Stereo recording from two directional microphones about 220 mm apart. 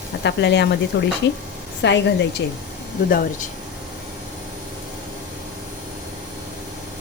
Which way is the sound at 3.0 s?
40° left (ahead or behind).